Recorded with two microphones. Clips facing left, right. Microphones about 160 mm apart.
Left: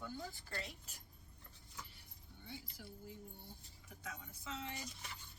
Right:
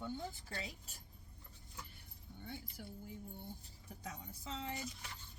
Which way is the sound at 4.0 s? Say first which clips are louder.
Right 2 dB; 35° right (ahead or behind).